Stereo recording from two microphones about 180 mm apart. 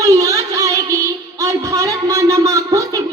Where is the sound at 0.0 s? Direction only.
20° right (ahead or behind).